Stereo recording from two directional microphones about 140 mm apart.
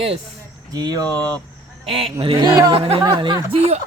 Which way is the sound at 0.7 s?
30° right (ahead or behind).